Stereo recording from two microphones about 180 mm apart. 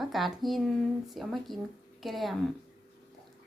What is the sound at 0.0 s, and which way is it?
A woman's voice, centre (ahead or behind).